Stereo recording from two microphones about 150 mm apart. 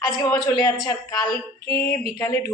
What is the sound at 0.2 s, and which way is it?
Speech, 30° left (ahead or behind).